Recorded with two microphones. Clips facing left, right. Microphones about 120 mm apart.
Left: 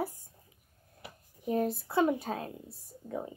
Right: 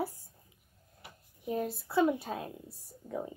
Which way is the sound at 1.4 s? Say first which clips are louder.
Left 4 dB; 45° left (ahead or behind).